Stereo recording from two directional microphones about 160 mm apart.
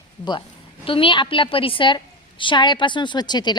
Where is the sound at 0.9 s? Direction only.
35° left (ahead or behind).